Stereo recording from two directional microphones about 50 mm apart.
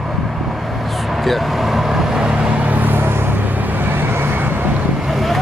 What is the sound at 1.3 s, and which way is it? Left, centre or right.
Vehicle, centre.